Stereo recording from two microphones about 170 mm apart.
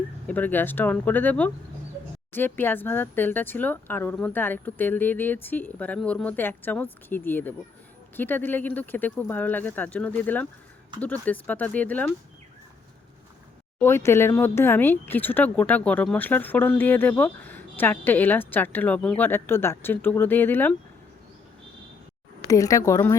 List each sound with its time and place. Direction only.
0.3 s speech: 10° left (ahead or behind)
13.8 s speech: 15° left (ahead or behind)
22.4 s speech: 20° left (ahead or behind)